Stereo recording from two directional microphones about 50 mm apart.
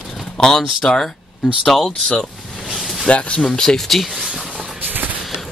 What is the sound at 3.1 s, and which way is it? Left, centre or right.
Speech, left.